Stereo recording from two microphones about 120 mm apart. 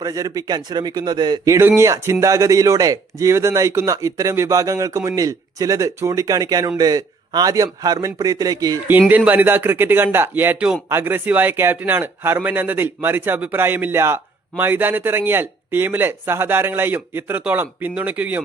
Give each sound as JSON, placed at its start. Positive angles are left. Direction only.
{"t": 0.0, "sound": "a man's voice", "side_deg": -30}
{"t": 1.5, "sound": "a man's voice", "side_deg": -20}
{"t": 8.9, "sound": "a man's voice", "side_deg": -15}